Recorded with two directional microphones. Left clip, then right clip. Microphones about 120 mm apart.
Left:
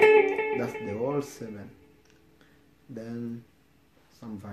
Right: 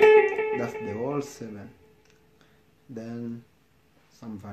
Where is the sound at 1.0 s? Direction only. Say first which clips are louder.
Left 2 dB; 10° right (ahead or behind).